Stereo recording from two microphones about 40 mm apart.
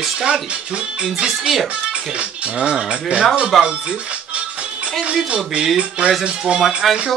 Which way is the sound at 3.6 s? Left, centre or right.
Right.